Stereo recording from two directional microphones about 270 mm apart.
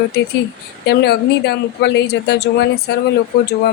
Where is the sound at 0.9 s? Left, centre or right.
Left.